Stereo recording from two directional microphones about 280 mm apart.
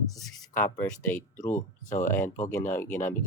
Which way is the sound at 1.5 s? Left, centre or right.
Left.